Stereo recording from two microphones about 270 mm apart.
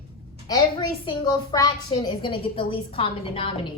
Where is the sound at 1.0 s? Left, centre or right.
Centre.